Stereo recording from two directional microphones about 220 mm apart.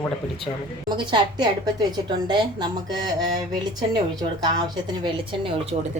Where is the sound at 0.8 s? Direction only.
20° right (ahead or behind).